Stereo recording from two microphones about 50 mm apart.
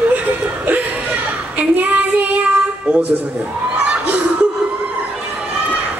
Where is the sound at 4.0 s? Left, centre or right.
Right.